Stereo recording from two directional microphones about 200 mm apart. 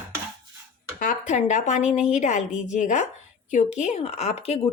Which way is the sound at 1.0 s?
40° left (ahead or behind).